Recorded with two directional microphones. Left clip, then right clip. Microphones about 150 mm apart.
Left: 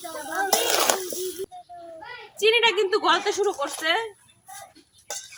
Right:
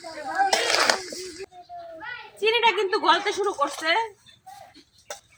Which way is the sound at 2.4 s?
5° left (ahead or behind).